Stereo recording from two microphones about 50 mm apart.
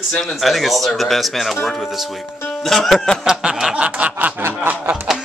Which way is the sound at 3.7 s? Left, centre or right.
Right.